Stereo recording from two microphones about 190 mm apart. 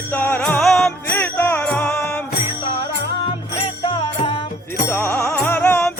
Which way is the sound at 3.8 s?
25° left (ahead or behind).